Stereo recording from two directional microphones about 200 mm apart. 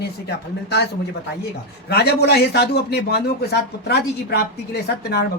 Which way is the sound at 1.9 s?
55° left (ahead or behind).